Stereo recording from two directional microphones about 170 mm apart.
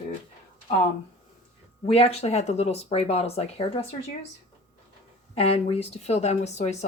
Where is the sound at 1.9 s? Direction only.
35° left (ahead or behind).